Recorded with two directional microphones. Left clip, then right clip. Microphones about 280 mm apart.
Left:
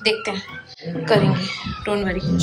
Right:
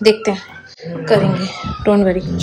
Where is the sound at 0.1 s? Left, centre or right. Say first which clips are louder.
Right 7 dB; centre.